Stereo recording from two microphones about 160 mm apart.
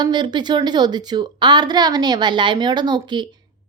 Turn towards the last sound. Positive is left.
turn(degrees=-30)  # may be behind; listen again after turning